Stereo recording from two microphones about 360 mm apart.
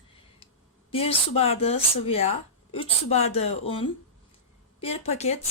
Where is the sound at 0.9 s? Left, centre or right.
Centre.